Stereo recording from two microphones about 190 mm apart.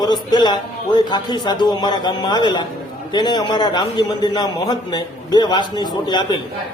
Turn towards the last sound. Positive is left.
turn(degrees=25)  # may be behind; listen again after turning